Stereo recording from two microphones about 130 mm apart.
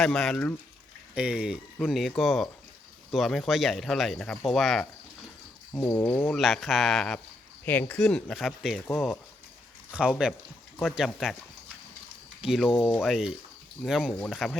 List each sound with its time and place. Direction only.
0.0 s speech: 5° left (ahead or behind)
1.1 s speech: 10° right (ahead or behind)
5.7 s a sound: 20° left (ahead or behind)
6.3 s speech: centre (ahead or behind)
7.6 s speech: 15° left (ahead or behind); by 8.8 s centre (ahead or behind)
9.9 s speech: 5° right (ahead or behind)
12.4 s speech: 5° right (ahead or behind)